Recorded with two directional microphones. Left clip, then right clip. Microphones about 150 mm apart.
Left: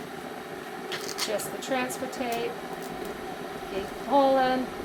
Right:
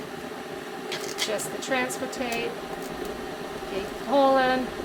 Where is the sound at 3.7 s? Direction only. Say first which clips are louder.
Right 1 dB; 25° right (ahead or behind).